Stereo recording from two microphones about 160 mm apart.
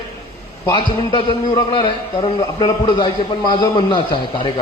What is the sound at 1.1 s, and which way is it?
A man's voice, 30° left (ahead or behind).